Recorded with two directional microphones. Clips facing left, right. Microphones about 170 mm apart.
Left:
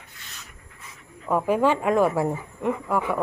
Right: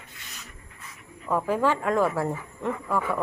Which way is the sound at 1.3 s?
15° left (ahead or behind).